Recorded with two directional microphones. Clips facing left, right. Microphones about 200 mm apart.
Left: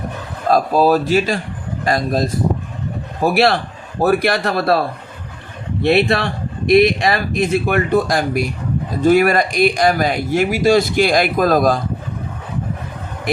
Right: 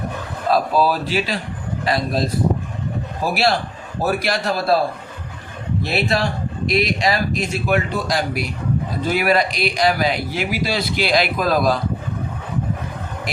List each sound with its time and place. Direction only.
0.5 s a man's voice: 45° left (ahead or behind)
3.2 s a man's voice: 60° left (ahead or behind)
5.8 s a man's voice: 60° left (ahead or behind)